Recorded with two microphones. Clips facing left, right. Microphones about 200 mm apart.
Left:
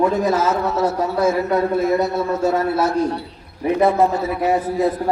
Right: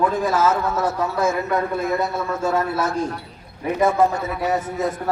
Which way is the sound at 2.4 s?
30° left (ahead or behind).